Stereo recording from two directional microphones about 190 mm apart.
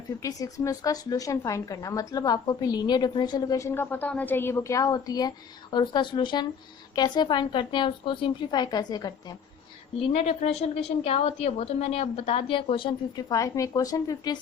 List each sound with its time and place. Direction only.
0.2 s a woman's voice: 20° left (ahead or behind)
10.1 s a woman's voice: 35° left (ahead or behind); by 14.3 s 20° left (ahead or behind)